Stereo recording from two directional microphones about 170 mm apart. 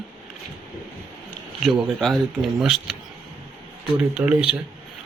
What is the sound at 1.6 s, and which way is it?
Speech, centre (ahead or behind).